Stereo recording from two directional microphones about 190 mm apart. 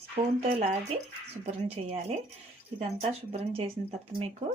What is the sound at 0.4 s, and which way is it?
Speech, 30° right (ahead or behind).